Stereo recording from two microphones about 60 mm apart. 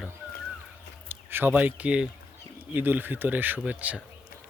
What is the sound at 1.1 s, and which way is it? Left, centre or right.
Speech, right.